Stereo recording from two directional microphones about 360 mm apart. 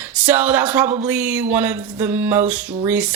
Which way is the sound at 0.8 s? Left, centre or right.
Centre.